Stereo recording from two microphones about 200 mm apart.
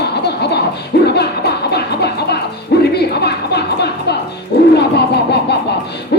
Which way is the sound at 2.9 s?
55° left (ahead or behind).